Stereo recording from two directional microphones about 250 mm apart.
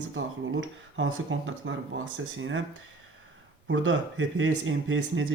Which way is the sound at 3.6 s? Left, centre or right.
Right.